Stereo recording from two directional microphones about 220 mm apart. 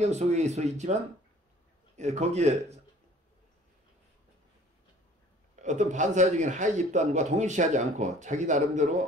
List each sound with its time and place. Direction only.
0.0 s a man's voice: 30° right (ahead or behind)
2.0 s a man's voice: 30° right (ahead or behind)
5.6 s a man's voice: 35° right (ahead or behind)